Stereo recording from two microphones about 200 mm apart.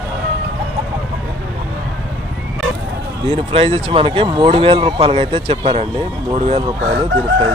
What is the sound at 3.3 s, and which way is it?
Speech, 30° right (ahead or behind).